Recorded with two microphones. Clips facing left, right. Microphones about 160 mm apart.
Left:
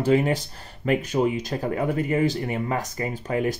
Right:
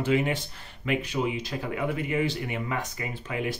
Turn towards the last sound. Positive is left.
turn(degrees=40)  # may be behind; listen again after turning